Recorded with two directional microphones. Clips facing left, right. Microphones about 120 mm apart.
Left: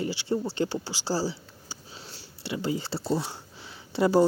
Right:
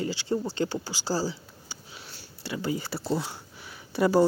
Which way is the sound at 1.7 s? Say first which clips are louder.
Left 2 dB; 30° left (ahead or behind).